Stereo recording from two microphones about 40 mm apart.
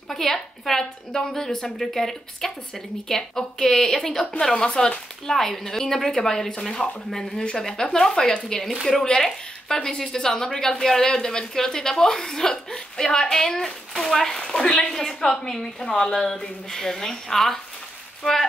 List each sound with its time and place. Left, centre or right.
0.1 s speech: centre
5.3 s speech: centre
14.4 s a woman's voice: centre